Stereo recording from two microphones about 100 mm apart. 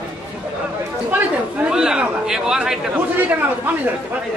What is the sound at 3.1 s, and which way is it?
Speech, 20° right (ahead or behind).